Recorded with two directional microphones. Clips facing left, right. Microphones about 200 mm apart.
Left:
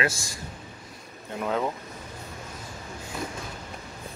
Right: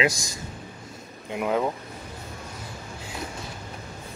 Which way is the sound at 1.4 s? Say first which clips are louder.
Right 3 dB; 10° right (ahead or behind).